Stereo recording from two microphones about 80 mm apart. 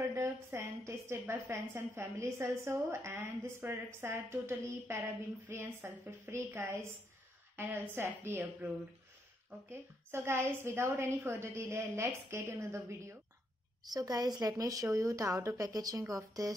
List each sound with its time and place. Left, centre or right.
0.2 s a woman's voice: right
7.5 s a woman's voice: right
9.7 s a woman's voice: right
13.8 s a woman's voice: right